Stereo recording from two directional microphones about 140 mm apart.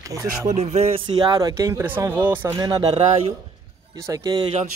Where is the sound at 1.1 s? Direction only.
30° right (ahead or behind).